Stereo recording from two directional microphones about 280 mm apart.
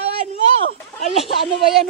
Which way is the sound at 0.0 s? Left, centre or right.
Right.